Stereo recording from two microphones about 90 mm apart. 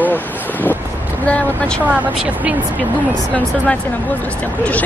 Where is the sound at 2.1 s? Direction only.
15° right (ahead or behind).